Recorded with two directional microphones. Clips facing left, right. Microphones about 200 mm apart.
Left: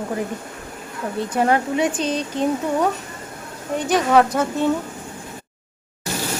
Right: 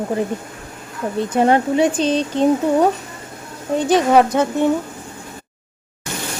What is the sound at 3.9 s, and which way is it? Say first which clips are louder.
Speech: right 3 dB; 25° right (ahead or behind).